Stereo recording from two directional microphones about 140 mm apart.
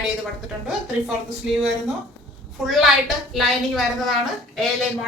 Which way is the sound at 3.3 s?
Centre (ahead or behind).